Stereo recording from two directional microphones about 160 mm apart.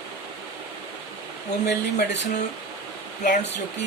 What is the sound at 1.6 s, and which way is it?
Speech, 90° left.